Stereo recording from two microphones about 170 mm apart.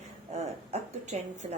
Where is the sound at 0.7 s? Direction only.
45° right (ahead or behind).